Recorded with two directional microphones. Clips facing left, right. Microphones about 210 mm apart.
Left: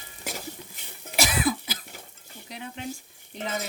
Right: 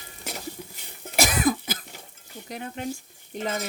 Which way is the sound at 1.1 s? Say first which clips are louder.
Right 3 dB; 45° right (ahead or behind).